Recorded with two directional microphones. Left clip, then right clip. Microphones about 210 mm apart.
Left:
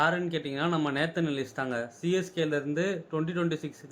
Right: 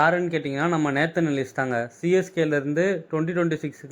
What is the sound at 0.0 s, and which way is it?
Speech, 25° right (ahead or behind).